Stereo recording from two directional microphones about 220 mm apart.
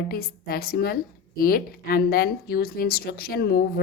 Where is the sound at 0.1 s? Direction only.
45° left (ahead or behind).